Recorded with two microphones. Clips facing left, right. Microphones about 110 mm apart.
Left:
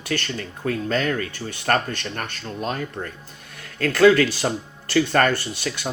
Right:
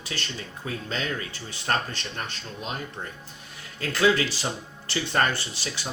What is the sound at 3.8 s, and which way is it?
Speech, 60° left (ahead or behind).